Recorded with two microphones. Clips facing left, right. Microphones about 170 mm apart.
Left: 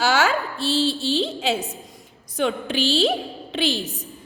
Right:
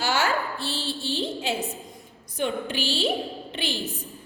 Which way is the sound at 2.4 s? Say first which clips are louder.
Left 5 dB; 90° left.